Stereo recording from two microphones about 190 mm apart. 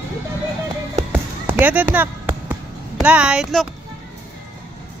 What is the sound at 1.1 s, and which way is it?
Basketball bounce, 10° right (ahead or behind).